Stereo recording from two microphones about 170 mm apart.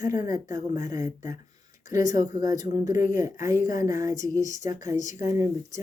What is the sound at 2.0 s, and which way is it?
Speech, 50° left (ahead or behind).